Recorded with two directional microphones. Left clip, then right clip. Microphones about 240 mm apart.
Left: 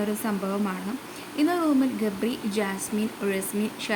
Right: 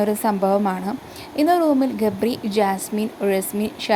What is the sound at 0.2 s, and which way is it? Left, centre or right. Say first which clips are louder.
Speech: right 10 dB; right.